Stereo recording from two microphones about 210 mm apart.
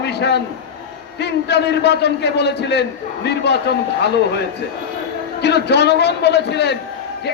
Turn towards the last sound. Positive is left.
turn(degrees=55)  # may be behind; listen again after turning